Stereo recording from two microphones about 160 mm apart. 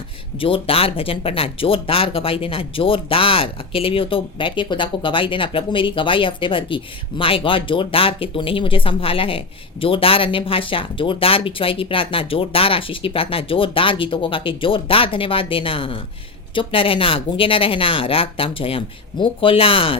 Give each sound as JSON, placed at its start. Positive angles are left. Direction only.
{"t": 0.3, "sound": "speech", "side_deg": 35}